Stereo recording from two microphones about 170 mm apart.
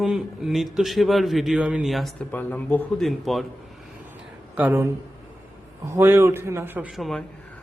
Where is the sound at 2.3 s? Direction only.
10° left (ahead or behind).